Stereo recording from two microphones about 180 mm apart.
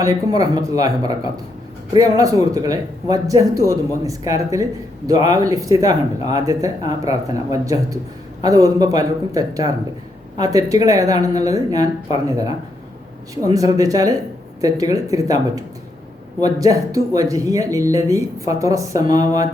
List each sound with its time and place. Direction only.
0.0 s speech: 20° right (ahead or behind)